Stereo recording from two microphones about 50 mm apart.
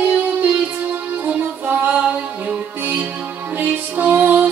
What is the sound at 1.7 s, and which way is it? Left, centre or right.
Music, right.